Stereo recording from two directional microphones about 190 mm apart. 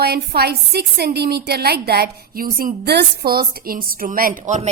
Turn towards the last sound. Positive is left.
turn(degrees=-40)  # may be behind; listen again after turning